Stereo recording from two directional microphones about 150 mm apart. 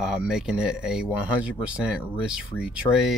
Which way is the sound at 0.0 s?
5° right (ahead or behind).